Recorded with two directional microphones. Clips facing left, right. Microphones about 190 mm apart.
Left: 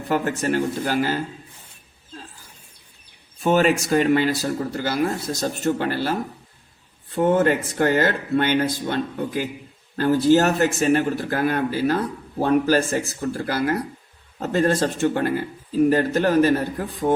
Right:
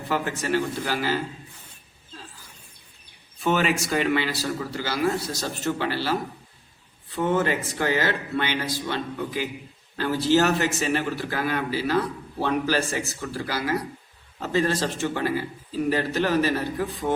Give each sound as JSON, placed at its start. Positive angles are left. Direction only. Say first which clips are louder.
{"t": 0.1, "sound": "a man's voice", "louder": "left 3 dB", "side_deg": 45}
{"t": 3.4, "sound": "a man's voice", "louder": "left 5 dB", "side_deg": 45}
{"t": 7.2, "sound": "a man's voice", "louder": "left 5 dB", "side_deg": 50}